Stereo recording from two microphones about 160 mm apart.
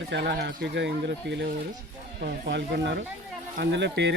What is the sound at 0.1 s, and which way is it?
Speech, 90° right.